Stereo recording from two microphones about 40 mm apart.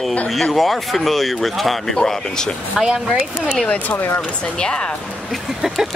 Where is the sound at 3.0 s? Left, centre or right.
Centre.